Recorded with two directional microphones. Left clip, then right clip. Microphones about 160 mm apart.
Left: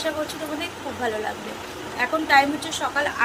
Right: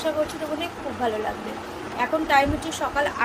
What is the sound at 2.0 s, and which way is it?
Speech, 5° right (ahead or behind).